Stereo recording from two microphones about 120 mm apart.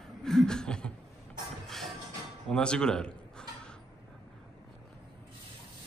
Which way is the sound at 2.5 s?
5° left (ahead or behind).